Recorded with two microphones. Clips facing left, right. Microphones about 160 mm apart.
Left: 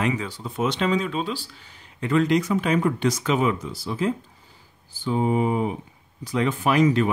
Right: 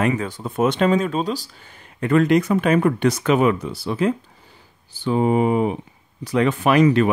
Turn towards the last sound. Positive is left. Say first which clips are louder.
# right 4 dB
turn(degrees=-65)  # may be behind; listen again after turning